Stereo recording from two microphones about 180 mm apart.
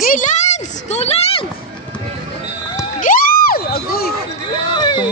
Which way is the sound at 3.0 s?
55° left (ahead or behind).